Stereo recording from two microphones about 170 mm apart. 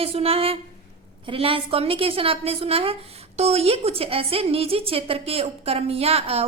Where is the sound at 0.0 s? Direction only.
35° right (ahead or behind).